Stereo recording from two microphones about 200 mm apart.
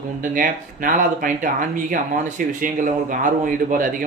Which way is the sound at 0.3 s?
40° right (ahead or behind).